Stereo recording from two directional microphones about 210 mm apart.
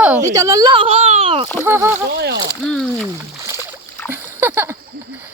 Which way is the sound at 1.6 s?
10° right (ahead or behind).